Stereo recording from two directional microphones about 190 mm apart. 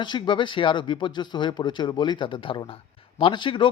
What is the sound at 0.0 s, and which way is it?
A man's voice, 25° left (ahead or behind).